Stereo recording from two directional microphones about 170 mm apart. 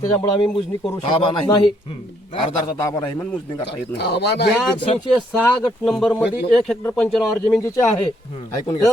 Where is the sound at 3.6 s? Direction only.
80° left.